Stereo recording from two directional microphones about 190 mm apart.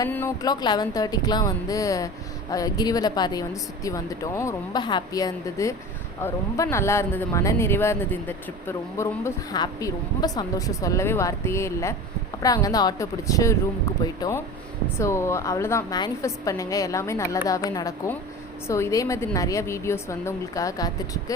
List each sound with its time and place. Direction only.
0.0 s a woman's voice: 15° left (ahead or behind)